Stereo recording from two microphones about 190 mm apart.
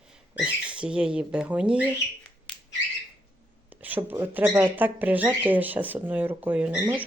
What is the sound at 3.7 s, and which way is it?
Speech, 10° right (ahead or behind).